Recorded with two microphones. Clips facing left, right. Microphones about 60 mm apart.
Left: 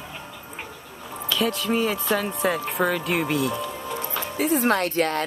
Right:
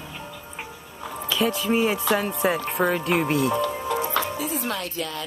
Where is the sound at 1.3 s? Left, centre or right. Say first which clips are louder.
Right 1 dB; centre.